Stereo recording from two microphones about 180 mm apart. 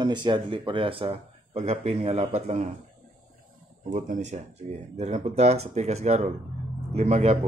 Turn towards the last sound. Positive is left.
turn(degrees=-40)  # may be behind; listen again after turning